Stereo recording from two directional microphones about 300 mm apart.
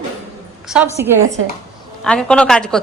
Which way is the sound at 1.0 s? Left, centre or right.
Centre.